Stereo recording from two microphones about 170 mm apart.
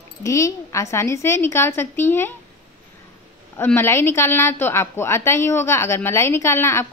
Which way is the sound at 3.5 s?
15° left (ahead or behind).